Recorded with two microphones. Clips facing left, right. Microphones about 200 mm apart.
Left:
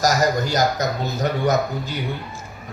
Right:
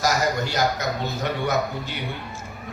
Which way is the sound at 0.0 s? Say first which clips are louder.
Left 4 dB; 40° left (ahead or behind).